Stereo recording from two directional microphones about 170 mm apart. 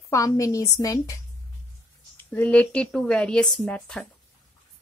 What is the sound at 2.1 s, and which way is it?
Speech, 10° left (ahead or behind).